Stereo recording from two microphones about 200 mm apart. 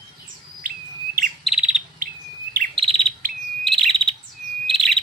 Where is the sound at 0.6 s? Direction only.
45° right (ahead or behind).